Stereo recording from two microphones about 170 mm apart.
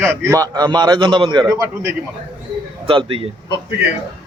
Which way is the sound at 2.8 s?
30° right (ahead or behind).